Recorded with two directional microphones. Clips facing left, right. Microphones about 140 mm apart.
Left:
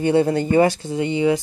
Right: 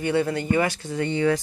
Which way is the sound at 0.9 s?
15° left (ahead or behind).